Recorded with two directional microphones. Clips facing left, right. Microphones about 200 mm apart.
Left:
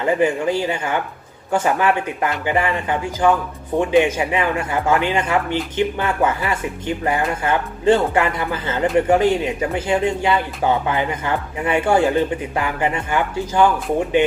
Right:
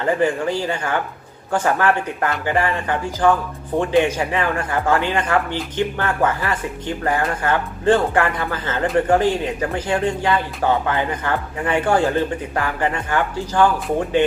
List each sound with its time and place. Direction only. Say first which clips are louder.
0.0 s speech: left 1 dB; 20° left (ahead or behind)